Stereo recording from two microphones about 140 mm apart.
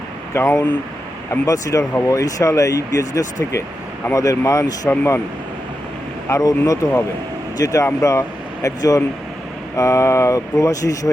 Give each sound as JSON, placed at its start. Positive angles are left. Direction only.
{"t": 0.3, "sound": "speech", "side_deg": 20}
{"t": 6.2, "sound": "speech", "side_deg": 25}